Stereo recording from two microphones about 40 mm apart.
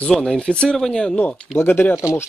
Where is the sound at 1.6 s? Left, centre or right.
Left.